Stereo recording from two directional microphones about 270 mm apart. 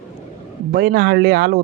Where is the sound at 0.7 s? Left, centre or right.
Right.